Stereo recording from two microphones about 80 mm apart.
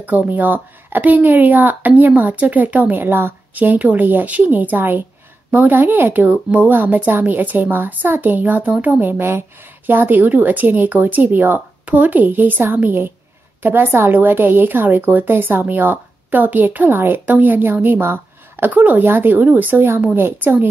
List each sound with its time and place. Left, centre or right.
0.0 s a woman's voice: centre